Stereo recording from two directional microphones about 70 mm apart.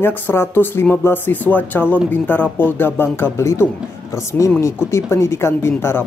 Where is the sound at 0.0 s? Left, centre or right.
Left.